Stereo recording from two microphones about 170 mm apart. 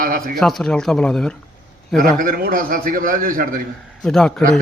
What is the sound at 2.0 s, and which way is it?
A man's voice, 55° right (ahead or behind).